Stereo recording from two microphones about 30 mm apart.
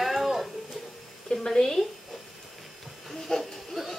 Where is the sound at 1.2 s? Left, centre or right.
Centre.